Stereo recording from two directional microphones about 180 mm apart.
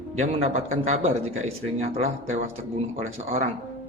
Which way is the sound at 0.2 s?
35° right (ahead or behind).